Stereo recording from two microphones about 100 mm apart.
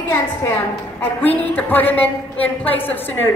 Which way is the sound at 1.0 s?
20° left (ahead or behind).